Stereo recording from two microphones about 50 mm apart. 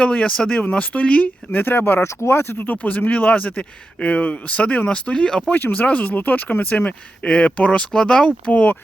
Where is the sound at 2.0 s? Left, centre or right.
Left; by 5.4 s centre.